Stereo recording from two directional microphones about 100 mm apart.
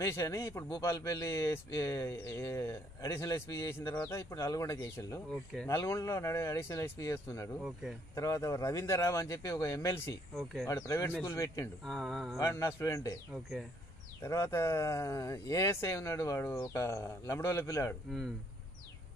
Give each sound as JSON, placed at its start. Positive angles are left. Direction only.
{"t": 0.0, "sound": "a man's voice", "side_deg": 30}
{"t": 5.3, "sound": "speech", "side_deg": 5}
{"t": 5.7, "sound": "a man's voice", "side_deg": 30}
{"t": 10.3, "sound": "speech", "side_deg": 0}
{"t": 10.7, "sound": "speech", "side_deg": 30}
{"t": 11.8, "sound": "speech", "side_deg": 0}
{"t": 12.4, "sound": "speech", "side_deg": 30}
{"t": 13.3, "sound": "speech", "side_deg": 0}
{"t": 14.2, "sound": "a man's voice", "side_deg": 30}